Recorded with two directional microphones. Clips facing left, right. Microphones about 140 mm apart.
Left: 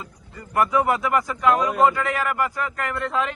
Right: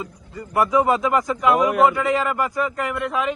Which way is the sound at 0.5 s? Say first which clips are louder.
Right 2 dB; 15° right (ahead or behind).